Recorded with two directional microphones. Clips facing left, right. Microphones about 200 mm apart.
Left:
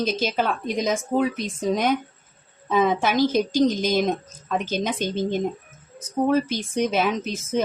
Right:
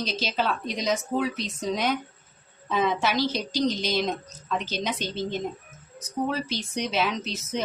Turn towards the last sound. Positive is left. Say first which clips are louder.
# left 4 dB
turn(degrees=50)  # may be behind; listen again after turning